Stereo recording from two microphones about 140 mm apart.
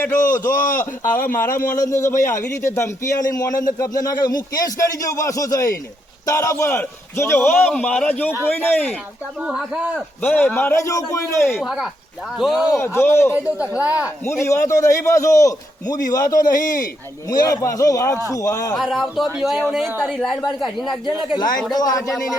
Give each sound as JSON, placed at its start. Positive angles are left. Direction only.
{"t": 0.2, "sound": "a man's voice", "side_deg": 70}
{"t": 1.8, "sound": "a man's voice", "side_deg": 20}
{"t": 9.4, "sound": "speech", "side_deg": -5}
{"t": 10.2, "sound": "a man's voice", "side_deg": 10}
{"t": 11.4, "sound": "speech", "side_deg": 0}
{"t": 12.8, "sound": "a man's voice", "side_deg": 15}
{"t": 13.3, "sound": "speech", "side_deg": -10}
{"t": 14.4, "sound": "speech", "side_deg": 20}
{"t": 16.4, "sound": "a man's voice", "side_deg": 75}
{"t": 17.2, "sound": "speech", "side_deg": 25}
{"t": 18.7, "sound": "speech", "side_deg": 0}
{"t": 19.9, "sound": "speech", "side_deg": -10}
{"t": 20.1, "sound": "speech", "side_deg": 0}
{"t": 21.3, "sound": "speech", "side_deg": 30}